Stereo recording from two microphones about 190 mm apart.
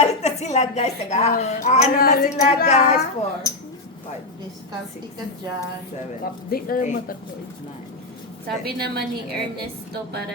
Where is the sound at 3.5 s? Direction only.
15° left (ahead or behind).